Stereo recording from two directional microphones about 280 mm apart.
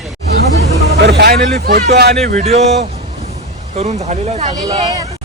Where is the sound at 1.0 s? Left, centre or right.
Right.